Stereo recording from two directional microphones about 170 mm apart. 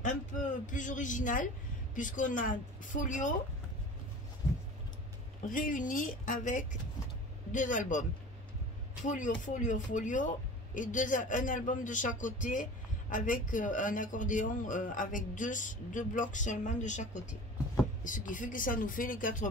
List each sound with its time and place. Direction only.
0.0 s a man's voice: 50° left (ahead or behind)
5.4 s a man's voice: 50° left (ahead or behind)
9.0 s a man's voice: 50° left (ahead or behind)